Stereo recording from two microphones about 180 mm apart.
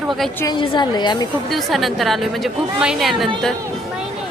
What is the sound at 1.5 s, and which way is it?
A woman's voice, centre (ahead or behind).